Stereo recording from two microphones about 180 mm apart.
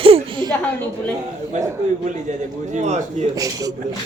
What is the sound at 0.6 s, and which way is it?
Speech, 10° left (ahead or behind).